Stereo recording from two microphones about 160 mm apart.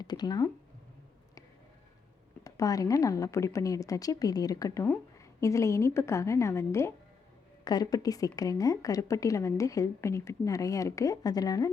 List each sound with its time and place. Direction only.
0.0 s a woman's voice: 25° left (ahead or behind)
2.4 s a woman's voice: 20° left (ahead or behind)